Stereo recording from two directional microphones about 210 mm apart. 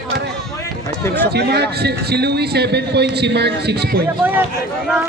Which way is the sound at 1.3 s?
50° right (ahead or behind).